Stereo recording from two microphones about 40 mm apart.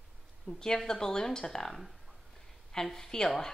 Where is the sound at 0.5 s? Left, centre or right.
Centre.